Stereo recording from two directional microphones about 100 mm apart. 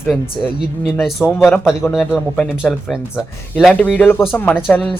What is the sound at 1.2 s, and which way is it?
Speech, 25° left (ahead or behind).